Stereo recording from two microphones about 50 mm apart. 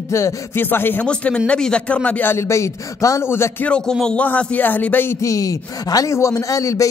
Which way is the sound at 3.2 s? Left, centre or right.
Left.